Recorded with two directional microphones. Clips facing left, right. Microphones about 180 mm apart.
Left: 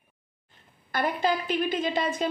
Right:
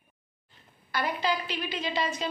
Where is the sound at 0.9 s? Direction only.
50° left (ahead or behind).